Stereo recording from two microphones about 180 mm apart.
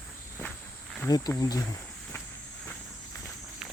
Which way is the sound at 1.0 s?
20° left (ahead or behind).